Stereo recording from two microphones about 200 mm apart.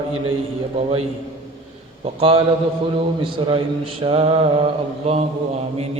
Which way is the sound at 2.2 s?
30° right (ahead or behind).